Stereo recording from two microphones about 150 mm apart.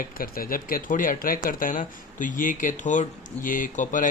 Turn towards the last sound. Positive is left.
turn(degrees=60)  # may be behind; listen again after turning